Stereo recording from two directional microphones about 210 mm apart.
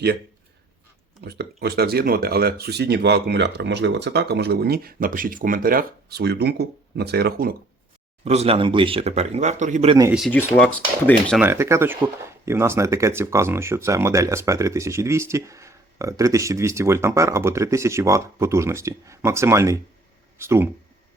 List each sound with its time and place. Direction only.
1.2 s speech: 50° right (ahead or behind)
8.2 s speech: 30° right (ahead or behind)
10.1 s speech: centre (ahead or behind)
11.3 s speech: 10° right (ahead or behind)